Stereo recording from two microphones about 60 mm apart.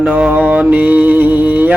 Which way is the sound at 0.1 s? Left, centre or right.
Right.